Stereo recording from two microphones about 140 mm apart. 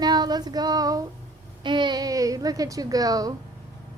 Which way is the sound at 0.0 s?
30° right (ahead or behind).